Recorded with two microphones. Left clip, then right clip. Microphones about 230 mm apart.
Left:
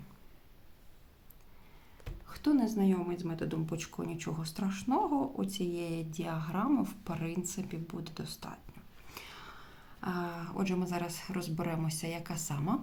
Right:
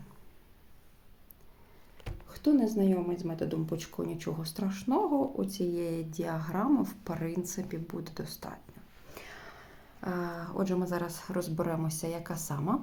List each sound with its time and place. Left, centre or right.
2.2 s a woman's voice: centre
6.1 s speech: left
6.5 s speech: centre
7.1 s speech: left
10.0 s speech: centre